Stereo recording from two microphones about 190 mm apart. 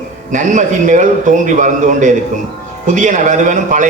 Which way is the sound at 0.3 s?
40° right (ahead or behind).